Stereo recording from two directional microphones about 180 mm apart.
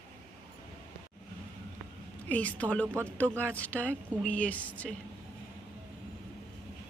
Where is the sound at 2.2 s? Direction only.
10° left (ahead or behind).